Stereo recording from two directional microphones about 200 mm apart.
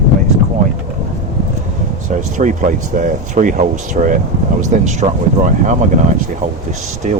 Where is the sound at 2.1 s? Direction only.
40° right (ahead or behind).